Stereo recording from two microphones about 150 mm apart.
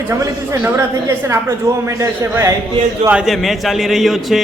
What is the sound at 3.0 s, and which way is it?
A man's voice, 5° right (ahead or behind).